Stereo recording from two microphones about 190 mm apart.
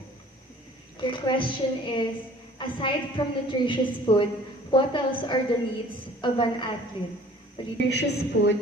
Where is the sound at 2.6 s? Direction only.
25° left (ahead or behind).